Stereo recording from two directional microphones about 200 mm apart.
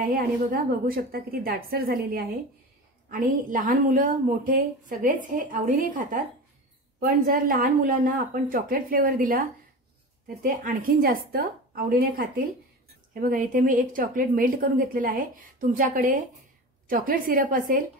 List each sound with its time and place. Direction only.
0.0 s a woman's voice: 45° right (ahead or behind)